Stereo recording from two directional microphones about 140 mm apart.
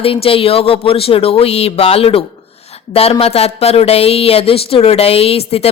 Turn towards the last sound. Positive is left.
turn(degrees=45)  # may be behind; listen again after turning